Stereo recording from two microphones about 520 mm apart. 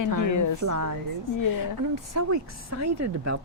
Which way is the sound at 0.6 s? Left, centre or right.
Right.